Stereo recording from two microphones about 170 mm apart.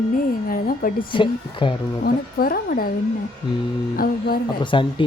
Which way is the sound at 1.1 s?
30° left (ahead or behind).